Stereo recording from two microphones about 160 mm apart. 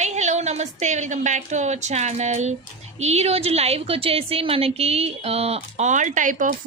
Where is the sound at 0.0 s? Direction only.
45° right (ahead or behind).